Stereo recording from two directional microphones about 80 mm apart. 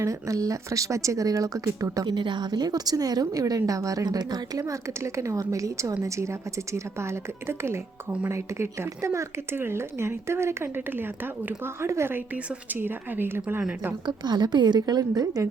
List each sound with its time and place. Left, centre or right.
0.0 s speech: right
2.0 s a woman's voice: right
4.6 s speech: right
14.0 s a woman's voice: right